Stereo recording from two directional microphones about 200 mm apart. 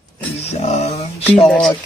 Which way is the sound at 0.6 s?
35° left (ahead or behind).